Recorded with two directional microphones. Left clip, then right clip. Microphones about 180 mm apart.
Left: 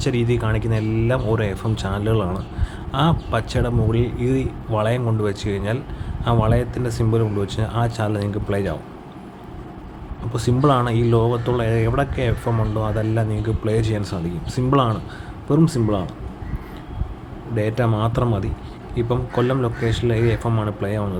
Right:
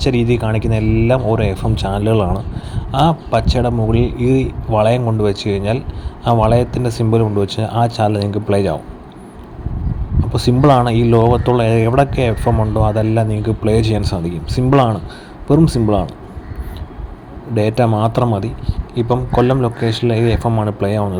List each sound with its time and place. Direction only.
0.0 s speech: 20° right (ahead or behind)
10.3 s speech: 20° right (ahead or behind)
17.5 s speech: 25° right (ahead or behind)